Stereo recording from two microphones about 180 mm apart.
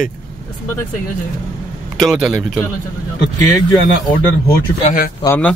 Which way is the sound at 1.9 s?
5° right (ahead or behind).